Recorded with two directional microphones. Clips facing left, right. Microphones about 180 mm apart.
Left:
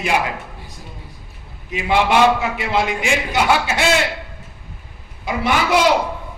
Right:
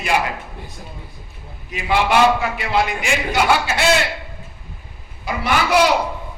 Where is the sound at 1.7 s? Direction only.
20° left (ahead or behind).